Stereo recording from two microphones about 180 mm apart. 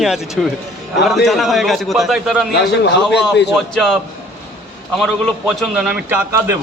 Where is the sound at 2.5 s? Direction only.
70° left (ahead or behind).